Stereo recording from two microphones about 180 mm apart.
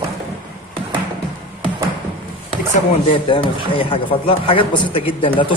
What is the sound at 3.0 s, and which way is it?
A woman's voice, 30° left (ahead or behind).